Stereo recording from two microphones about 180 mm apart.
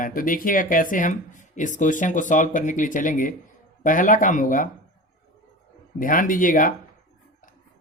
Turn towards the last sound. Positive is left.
turn(degrees=50)  # may be behind; listen again after turning